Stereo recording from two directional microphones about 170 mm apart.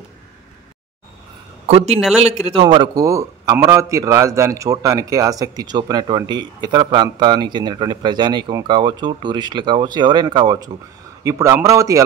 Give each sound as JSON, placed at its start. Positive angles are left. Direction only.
{"t": 1.7, "sound": "speech", "side_deg": -35}
{"t": 2.0, "sound": "speech", "side_deg": -5}
{"t": 2.3, "sound": "a man's voice", "side_deg": -35}